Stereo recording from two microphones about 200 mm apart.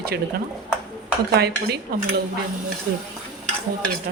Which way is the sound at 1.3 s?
55° right (ahead or behind).